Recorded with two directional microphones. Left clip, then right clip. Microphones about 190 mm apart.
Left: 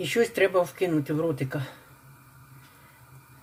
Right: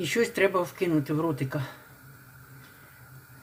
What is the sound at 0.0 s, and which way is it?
Speech, 5° left (ahead or behind).